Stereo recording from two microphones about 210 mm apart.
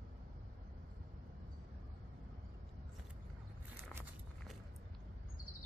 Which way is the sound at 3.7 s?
10° right (ahead or behind).